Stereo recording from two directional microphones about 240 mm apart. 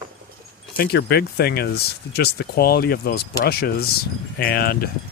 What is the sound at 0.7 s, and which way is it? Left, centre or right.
Speech, left.